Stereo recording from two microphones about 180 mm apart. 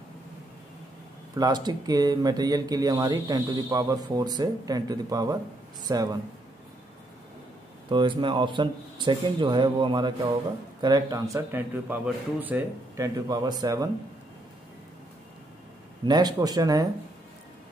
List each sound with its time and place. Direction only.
1.3 s speech: 20° right (ahead or behind)
7.9 s speech: 25° right (ahead or behind)
16.1 s speech: 20° right (ahead or behind)